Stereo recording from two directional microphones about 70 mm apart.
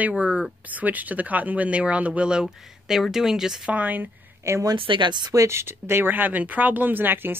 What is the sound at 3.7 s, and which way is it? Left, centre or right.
Speech, right.